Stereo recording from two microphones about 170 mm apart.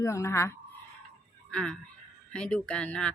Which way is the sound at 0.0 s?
15° left (ahead or behind).